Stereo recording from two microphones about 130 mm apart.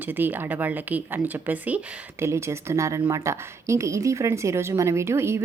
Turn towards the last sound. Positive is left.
turn(degrees=-20)  # may be behind; listen again after turning